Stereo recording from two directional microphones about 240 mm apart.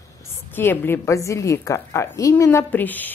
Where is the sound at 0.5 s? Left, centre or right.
Centre.